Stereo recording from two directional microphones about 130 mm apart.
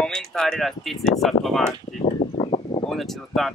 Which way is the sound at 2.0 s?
60° left (ahead or behind).